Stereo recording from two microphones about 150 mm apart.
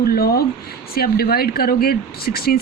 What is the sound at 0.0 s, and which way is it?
Speech, 85° left.